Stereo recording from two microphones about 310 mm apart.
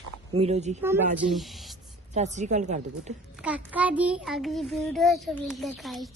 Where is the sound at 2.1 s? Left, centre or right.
Right.